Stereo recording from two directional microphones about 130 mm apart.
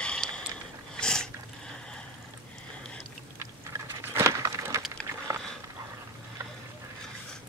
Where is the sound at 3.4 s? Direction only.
20° right (ahead or behind).